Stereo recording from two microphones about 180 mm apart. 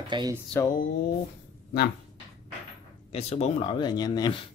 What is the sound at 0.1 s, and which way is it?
Music, 25° right (ahead or behind).